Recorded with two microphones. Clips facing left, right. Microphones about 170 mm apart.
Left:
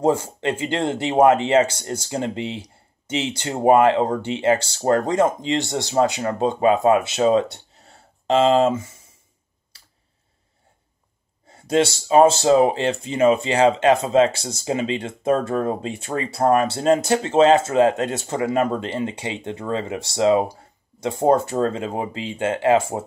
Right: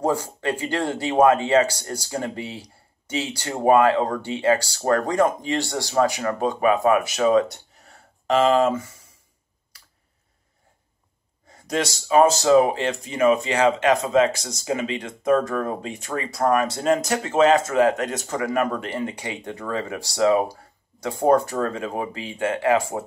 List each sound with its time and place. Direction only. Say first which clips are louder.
0.0 s speech: left 3 dB; 20° left (ahead or behind)
9.7 s tick: right 1 dB; 25° left (ahead or behind)
11.4 s speech: left 6 dB; 30° left (ahead or behind)